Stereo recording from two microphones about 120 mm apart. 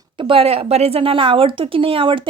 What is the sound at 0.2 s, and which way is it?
A woman's voice, 50° right (ahead or behind).